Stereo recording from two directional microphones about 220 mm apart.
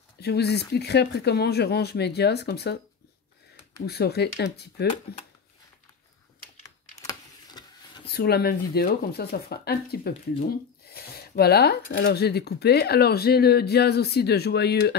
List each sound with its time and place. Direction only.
0.2 s speech: 50° left (ahead or behind)
3.8 s speech: 45° left (ahead or behind)
7.0 s a sound: 15° left (ahead or behind)
8.1 s speech: 45° left (ahead or behind)